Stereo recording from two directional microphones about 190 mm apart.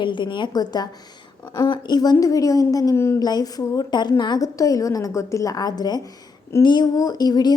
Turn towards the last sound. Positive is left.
turn(degrees=20)  # may be behind; listen again after turning